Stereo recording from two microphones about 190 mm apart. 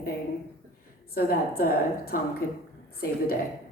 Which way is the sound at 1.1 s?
50° left (ahead or behind).